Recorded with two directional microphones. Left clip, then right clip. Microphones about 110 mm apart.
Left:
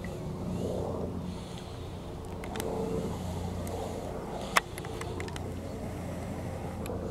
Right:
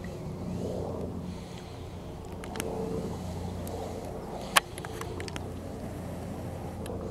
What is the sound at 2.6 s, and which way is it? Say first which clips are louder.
Vehicle: left 1 dB; 15° left (ahead or behind).